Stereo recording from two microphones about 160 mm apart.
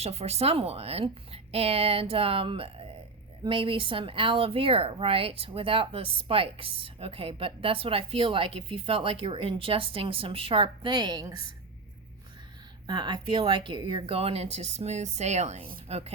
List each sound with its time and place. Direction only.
0.0 s speech: 40° right (ahead or behind)
12.9 s speech: 25° right (ahead or behind)